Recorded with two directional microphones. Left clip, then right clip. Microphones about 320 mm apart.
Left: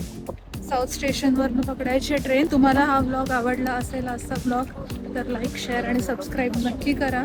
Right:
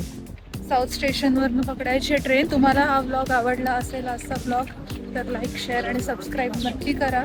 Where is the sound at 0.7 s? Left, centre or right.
Centre.